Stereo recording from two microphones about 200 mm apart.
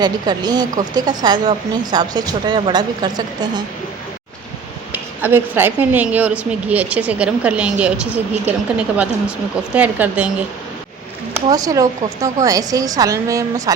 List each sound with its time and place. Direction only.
0.0 s speech: 20° right (ahead or behind)
4.9 s a woman's voice: 10° right (ahead or behind)
11.3 s a woman's voice: 20° right (ahead or behind)